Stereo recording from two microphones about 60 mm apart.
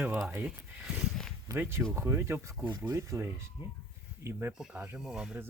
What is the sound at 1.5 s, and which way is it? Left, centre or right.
Speech, right.